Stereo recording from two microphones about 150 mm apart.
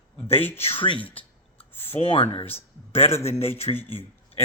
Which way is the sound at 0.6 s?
40° left (ahead or behind).